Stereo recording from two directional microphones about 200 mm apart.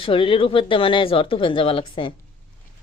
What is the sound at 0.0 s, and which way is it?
Speech, 25° left (ahead or behind).